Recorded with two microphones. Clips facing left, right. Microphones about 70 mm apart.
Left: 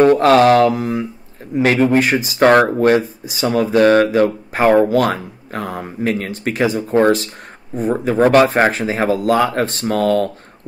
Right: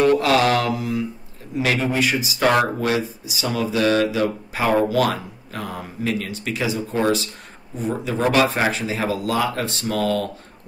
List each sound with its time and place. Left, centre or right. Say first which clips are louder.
0.0 s mantra: left 6 dB; left
0.7 s speech: left 4 dB; left